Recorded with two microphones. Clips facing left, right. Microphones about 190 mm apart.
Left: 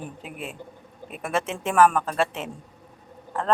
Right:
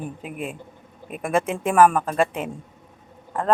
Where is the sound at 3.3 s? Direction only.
15° right (ahead or behind).